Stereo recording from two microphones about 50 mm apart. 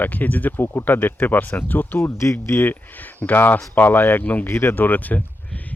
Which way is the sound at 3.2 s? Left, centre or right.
Left.